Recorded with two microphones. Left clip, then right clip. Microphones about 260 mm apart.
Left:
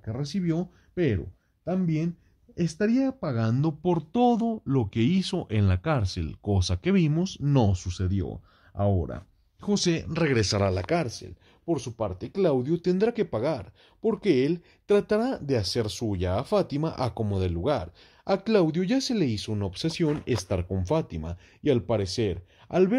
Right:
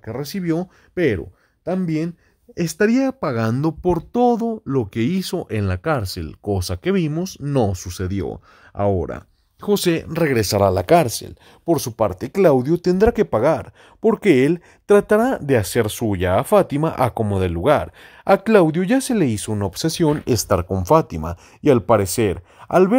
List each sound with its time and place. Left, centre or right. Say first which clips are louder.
0.0 s speech: right 6 dB; right